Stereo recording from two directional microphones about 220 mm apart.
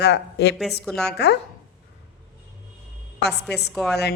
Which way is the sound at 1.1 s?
50° left (ahead or behind).